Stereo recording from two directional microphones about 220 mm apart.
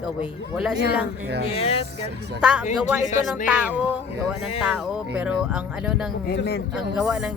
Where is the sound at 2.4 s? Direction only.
5° right (ahead or behind).